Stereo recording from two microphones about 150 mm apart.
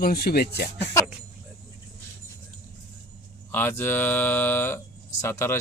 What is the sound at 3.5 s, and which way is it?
Speech, 15° left (ahead or behind).